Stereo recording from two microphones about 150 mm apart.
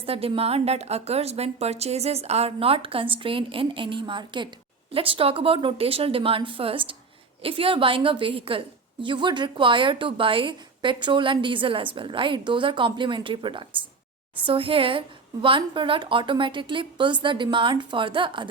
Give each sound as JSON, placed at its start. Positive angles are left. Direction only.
{"t": 0.0, "sound": "a woman's voice", "side_deg": -40}